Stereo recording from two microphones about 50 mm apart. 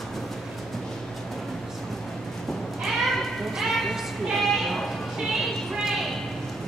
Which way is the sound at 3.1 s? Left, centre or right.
Centre.